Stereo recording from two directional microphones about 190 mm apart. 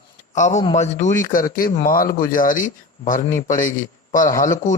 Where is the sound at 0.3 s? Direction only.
40° left (ahead or behind).